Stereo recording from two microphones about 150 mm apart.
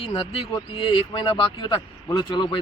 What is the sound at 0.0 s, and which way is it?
Speech, 35° left (ahead or behind).